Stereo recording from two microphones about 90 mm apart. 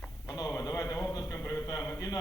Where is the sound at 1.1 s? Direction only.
40° left (ahead or behind).